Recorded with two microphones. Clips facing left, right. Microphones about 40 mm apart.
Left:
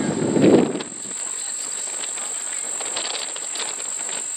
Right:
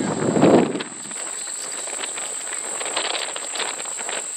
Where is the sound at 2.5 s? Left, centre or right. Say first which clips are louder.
Right 6 dB; centre.